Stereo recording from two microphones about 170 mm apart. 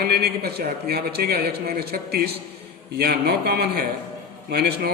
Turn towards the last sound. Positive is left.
turn(degrees=-65)  # may be behind; listen again after turning